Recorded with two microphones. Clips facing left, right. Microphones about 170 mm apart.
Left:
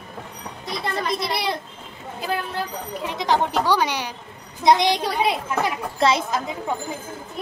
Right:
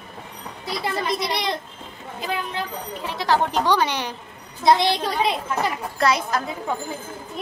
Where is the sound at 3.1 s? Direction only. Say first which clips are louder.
Even; 15° left (ahead or behind).